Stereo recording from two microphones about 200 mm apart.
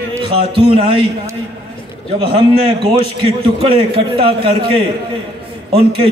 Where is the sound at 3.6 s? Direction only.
30° right (ahead or behind).